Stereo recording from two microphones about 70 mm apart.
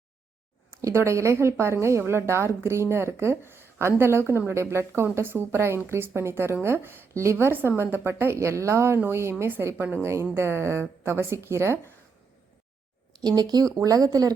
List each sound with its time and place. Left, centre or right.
0.7 s a woman's voice: right
13.2 s speech: right
13.7 s speech: right